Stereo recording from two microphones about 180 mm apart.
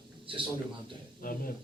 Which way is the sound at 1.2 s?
50° left (ahead or behind).